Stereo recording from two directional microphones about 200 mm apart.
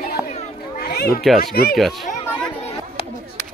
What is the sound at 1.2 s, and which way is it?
Speech, centre (ahead or behind).